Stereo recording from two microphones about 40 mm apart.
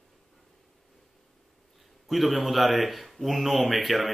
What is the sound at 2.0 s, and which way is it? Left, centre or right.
Speech, centre.